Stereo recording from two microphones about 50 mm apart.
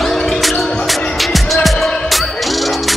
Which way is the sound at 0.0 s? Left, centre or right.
Centre.